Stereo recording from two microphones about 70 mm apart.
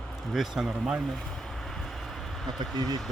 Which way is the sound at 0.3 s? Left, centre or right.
Centre.